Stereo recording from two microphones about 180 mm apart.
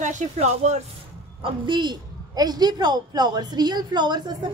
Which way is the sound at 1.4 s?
25° right (ahead or behind).